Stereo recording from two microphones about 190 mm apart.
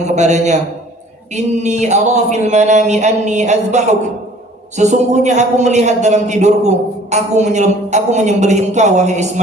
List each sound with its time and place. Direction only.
0.2 s a man's voice: 40° right (ahead or behind)